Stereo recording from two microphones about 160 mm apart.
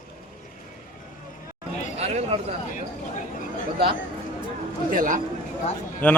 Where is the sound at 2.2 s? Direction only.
35° right (ahead or behind).